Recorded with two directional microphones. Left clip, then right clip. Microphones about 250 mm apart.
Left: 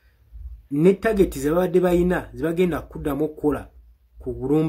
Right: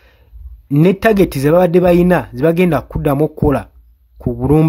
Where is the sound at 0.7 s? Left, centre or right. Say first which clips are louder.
Right 7 dB; right.